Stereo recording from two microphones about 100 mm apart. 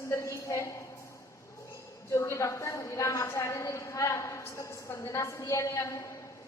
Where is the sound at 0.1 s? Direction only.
30° left (ahead or behind).